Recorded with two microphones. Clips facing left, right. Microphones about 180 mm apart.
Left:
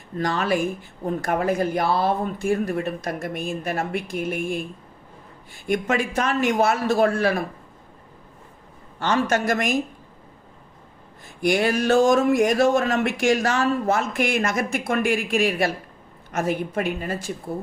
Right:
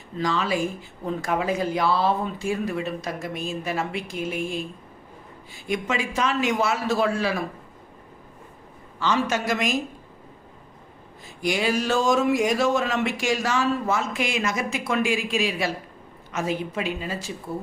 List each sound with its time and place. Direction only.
0.2 s speech: 55° left (ahead or behind)
9.0 s speech: 55° left (ahead or behind)
11.4 s speech: 55° left (ahead or behind)